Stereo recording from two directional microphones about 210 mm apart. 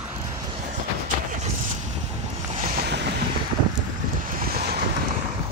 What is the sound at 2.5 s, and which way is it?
Boat, 40° right (ahead or behind).